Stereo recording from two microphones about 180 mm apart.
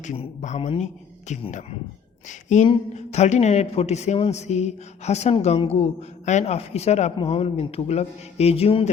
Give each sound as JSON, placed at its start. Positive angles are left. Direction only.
{"t": 0.0, "sound": "a man's voice", "side_deg": 40}